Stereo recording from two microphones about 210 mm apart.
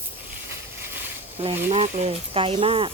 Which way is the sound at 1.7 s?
30° right (ahead or behind).